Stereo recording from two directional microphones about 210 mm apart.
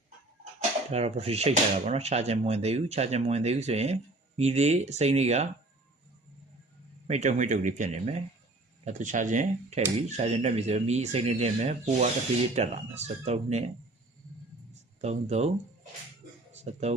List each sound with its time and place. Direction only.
0.9 s speech: 30° right (ahead or behind)
7.1 s speech: 35° right (ahead or behind)
15.0 s speech: 30° right (ahead or behind)
16.5 s a sound: 30° right (ahead or behind)